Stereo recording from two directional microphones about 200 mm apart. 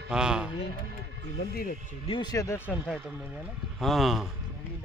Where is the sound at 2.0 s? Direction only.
25° left (ahead or behind).